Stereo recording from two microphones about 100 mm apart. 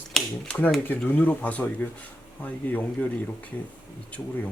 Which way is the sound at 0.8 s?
15° left (ahead or behind).